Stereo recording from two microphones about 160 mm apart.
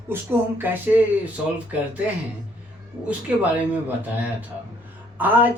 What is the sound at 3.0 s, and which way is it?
Speech, 10° right (ahead or behind).